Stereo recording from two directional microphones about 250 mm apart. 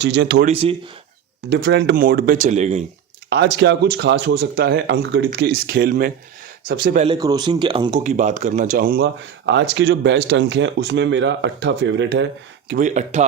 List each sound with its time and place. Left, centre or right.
0.0 s speech: right
0.4 s speech: right
1.5 s speech: right
3.2 s speech: right
7.1 s speech: centre; by 9.0 s right
9.5 s speech: right